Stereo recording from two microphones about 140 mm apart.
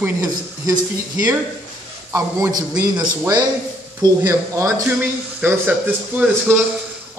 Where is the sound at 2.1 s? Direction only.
20° right (ahead or behind).